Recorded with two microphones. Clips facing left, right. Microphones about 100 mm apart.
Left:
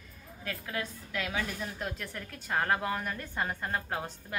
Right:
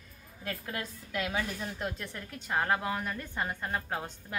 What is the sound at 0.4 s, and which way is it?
Speech, 35° right (ahead or behind).